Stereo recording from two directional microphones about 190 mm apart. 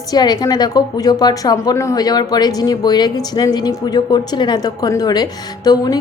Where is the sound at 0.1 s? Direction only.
20° left (ahead or behind).